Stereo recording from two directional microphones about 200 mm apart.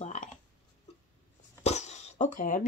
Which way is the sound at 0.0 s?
35° left (ahead or behind).